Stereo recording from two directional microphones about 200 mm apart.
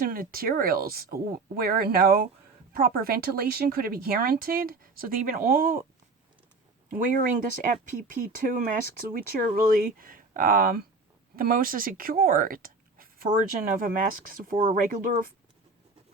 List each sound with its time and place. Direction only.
0.0 s speech: 45° right (ahead or behind)
6.9 s speech: 45° right (ahead or behind)